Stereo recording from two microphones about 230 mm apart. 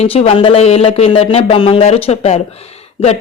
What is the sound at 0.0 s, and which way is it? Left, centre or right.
Speech, left.